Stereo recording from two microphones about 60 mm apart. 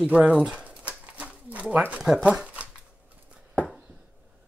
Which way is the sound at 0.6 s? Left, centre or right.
Right.